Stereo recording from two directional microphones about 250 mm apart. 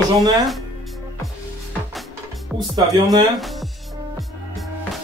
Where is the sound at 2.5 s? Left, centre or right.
Centre.